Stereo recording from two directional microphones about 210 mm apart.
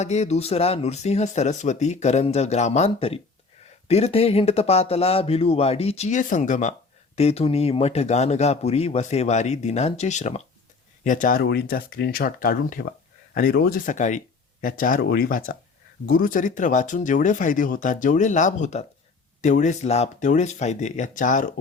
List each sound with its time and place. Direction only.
0.0 s speech: 30° left (ahead or behind)